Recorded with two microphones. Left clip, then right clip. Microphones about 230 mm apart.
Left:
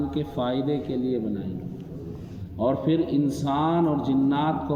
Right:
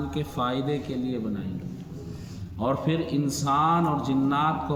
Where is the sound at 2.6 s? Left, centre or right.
Right.